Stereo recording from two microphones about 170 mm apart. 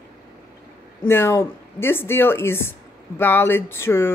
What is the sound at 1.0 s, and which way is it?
Speech, 15° left (ahead or behind).